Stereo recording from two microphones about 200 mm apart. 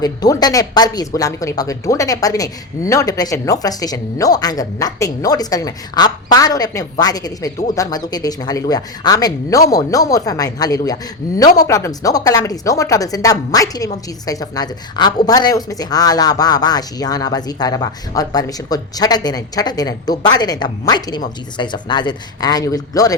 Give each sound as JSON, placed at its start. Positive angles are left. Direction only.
{"t": 0.0, "sound": "speech", "side_deg": 20}